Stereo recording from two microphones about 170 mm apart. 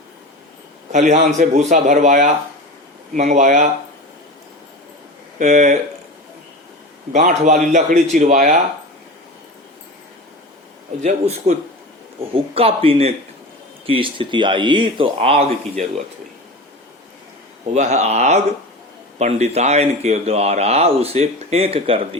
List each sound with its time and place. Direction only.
1.1 s a man's voice: 45° right (ahead or behind)
5.4 s a man's voice: 45° right (ahead or behind)
7.2 s a man's voice: 50° right (ahead or behind)
10.9 s a man's voice: 45° right (ahead or behind)
17.7 s speech: 40° right (ahead or behind)